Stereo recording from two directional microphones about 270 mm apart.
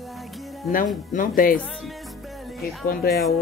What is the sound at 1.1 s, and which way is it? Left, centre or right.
Speech, left.